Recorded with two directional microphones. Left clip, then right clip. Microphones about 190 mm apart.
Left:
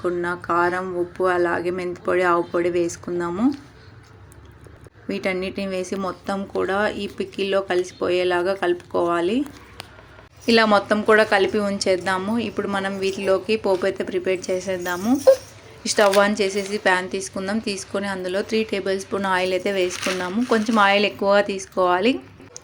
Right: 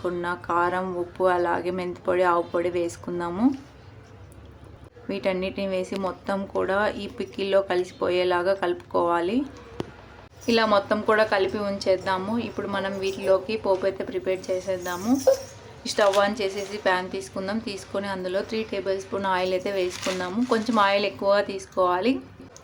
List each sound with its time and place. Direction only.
0.0 s speech: 15° left (ahead or behind)
5.0 s speech: 20° left (ahead or behind)
10.4 s a woman's voice: 25° left (ahead or behind)